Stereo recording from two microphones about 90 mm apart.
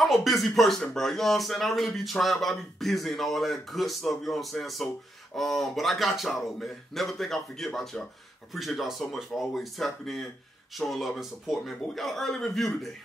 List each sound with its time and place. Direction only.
0.0 s speech: centre (ahead or behind)